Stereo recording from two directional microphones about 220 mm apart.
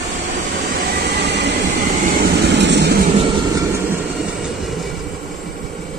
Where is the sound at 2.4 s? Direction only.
50° right (ahead or behind).